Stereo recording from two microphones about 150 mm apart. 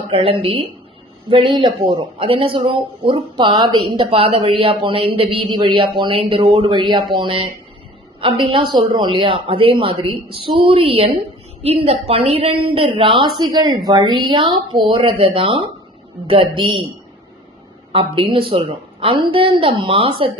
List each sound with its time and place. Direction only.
0.1 s speech: 35° right (ahead or behind)
17.9 s speech: 40° right (ahead or behind)